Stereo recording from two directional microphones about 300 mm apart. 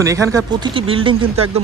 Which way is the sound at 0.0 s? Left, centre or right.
Centre.